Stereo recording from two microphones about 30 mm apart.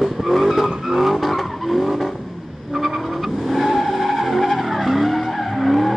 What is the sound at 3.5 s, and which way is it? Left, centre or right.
Vehicle, centre.